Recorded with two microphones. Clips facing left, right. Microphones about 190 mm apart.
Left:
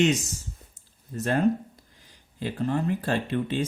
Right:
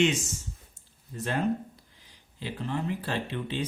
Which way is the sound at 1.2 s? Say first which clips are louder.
Left 5 dB; 45° left (ahead or behind).